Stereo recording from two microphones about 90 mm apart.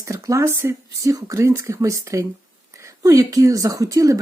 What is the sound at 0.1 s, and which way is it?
Speech, 35° right (ahead or behind).